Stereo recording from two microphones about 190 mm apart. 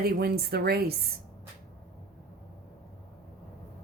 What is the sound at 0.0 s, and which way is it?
Speech, 55° right (ahead or behind).